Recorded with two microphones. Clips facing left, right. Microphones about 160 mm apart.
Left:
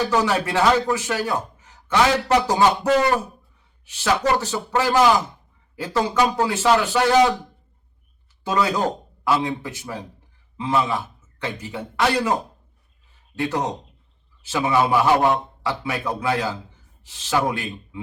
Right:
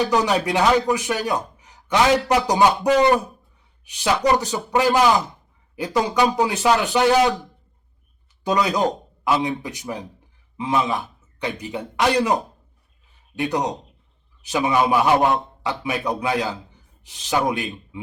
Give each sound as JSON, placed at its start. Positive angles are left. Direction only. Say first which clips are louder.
{"t": 0.0, "sound": "speech", "louder": "right 1 dB", "side_deg": -15}
{"t": 8.4, "sound": "speech", "louder": "right 1 dB", "side_deg": -15}